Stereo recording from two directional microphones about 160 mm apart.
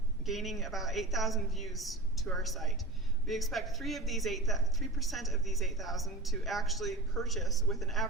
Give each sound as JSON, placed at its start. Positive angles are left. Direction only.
{"t": 0.3, "sound": "speech", "side_deg": 0}